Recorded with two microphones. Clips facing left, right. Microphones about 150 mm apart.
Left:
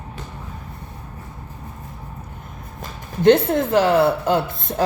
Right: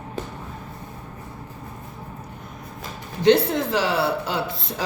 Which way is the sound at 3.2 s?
50° left (ahead or behind).